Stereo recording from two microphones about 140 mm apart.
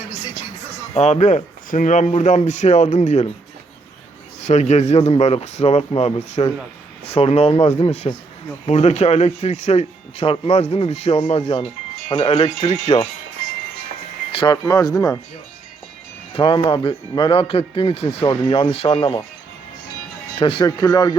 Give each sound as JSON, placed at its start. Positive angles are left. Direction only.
{"t": 0.9, "sound": "speech", "side_deg": 55}
{"t": 4.4, "sound": "speech", "side_deg": 55}
{"t": 14.3, "sound": "speech", "side_deg": 30}
{"t": 16.3, "sound": "speech", "side_deg": 40}
{"t": 20.4, "sound": "speech", "side_deg": 40}
{"t": 20.7, "sound": "speech", "side_deg": 25}